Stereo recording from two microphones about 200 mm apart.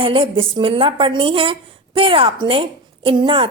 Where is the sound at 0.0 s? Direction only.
25° right (ahead or behind).